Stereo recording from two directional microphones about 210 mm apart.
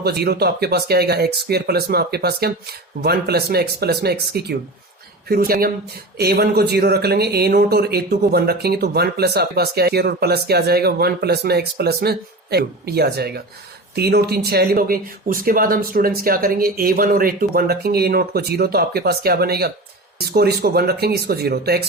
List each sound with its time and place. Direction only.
0.0 s speech: 50° right (ahead or behind)